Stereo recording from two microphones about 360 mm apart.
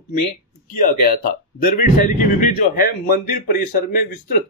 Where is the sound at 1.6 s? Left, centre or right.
Left.